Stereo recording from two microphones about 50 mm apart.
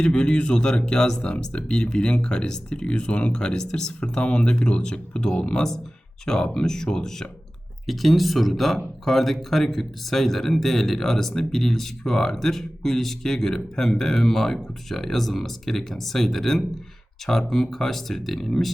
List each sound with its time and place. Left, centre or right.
0.0 s speech: centre